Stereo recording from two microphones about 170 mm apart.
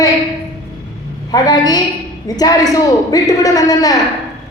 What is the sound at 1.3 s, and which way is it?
A woman's voice, 25° left (ahead or behind).